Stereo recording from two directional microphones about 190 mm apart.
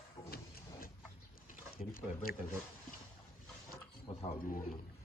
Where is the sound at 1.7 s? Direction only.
50° left (ahead or behind).